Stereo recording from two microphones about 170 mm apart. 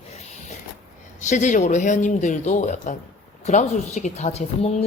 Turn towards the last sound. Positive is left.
turn(degrees=40)  # may be behind; listen again after turning